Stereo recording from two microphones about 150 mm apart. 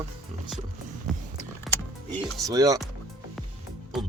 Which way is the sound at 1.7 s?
Centre (ahead or behind).